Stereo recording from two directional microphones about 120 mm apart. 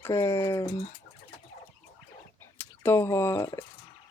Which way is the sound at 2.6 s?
20° left (ahead or behind).